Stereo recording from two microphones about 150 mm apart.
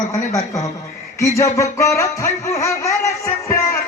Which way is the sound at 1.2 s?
20° left (ahead or behind).